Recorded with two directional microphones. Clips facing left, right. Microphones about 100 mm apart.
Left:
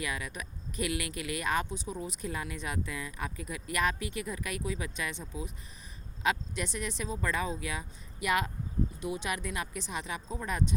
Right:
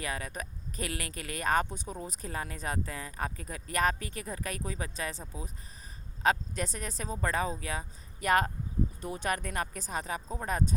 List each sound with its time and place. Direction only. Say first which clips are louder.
0.0 s speech: even; 40° right (ahead or behind)